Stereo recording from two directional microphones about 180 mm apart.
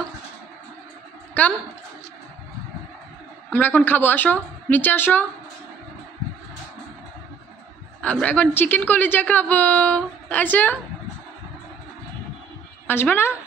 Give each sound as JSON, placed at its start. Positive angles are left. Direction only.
{"t": 1.4, "sound": "a woman's voice", "side_deg": 10}
{"t": 3.4, "sound": "a woman's voice", "side_deg": 10}
{"t": 8.0, "sound": "a woman's voice", "side_deg": 5}
{"t": 12.8, "sound": "a woman's voice", "side_deg": 10}